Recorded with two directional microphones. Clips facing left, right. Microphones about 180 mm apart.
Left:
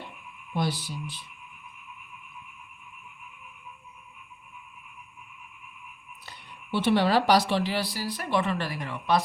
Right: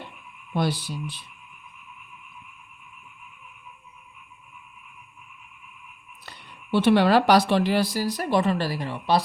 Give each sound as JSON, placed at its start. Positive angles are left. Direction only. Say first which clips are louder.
{"t": 0.5, "sound": "speech", "louder": "right 4 dB", "side_deg": -65}
{"t": 6.2, "sound": "speech", "louder": "right 2 dB", "side_deg": -65}